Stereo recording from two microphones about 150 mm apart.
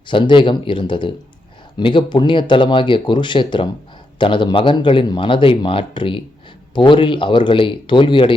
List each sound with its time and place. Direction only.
0.1 s speech: 35° left (ahead or behind)